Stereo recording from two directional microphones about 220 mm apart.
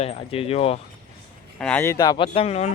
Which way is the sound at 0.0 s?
25° left (ahead or behind).